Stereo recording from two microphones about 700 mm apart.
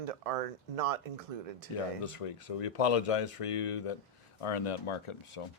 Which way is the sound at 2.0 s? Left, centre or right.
Left.